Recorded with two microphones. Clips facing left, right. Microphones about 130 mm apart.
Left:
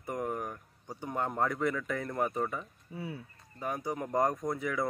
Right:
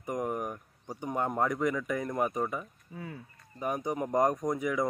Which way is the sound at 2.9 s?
5° left (ahead or behind).